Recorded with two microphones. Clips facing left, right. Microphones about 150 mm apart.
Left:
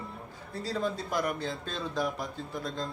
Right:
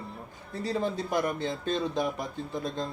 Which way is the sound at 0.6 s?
20° right (ahead or behind).